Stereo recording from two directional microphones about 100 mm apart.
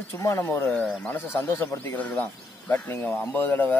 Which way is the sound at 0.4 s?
20° left (ahead or behind).